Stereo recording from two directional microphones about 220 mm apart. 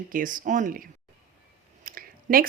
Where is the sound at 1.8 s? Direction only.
40° right (ahead or behind).